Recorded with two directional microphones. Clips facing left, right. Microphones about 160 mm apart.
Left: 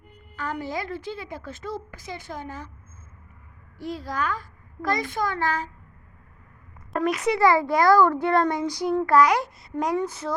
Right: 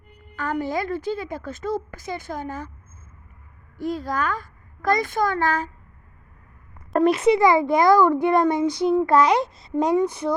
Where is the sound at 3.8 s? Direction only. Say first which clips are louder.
Right 4 dB; 50° right (ahead or behind).